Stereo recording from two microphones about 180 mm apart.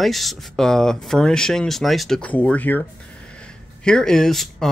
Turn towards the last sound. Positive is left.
turn(degrees=0)  # may be behind; listen again after turning